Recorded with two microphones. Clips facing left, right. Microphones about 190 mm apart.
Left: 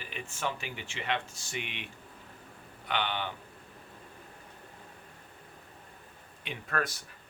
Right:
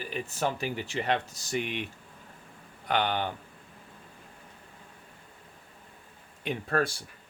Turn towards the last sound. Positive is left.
turn(degrees=-30)  # may be behind; listen again after turning